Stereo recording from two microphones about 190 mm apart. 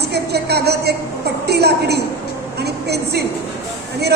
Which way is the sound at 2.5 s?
60° right (ahead or behind).